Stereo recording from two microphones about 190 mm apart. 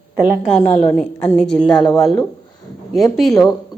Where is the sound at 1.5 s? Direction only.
5° left (ahead or behind).